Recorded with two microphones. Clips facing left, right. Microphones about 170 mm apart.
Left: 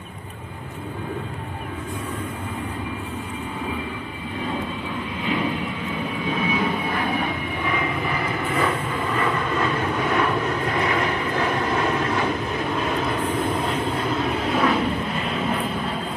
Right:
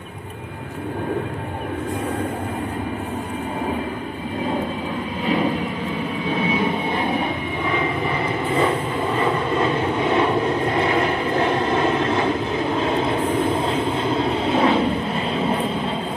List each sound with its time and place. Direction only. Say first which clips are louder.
6.5 s vehicle: right 2 dB; 25° right (ahead or behind)